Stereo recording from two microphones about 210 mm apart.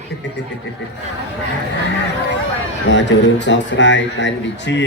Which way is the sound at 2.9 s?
60° left (ahead or behind).